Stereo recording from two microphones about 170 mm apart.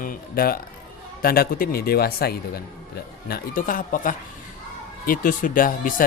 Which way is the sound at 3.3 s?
55° left (ahead or behind).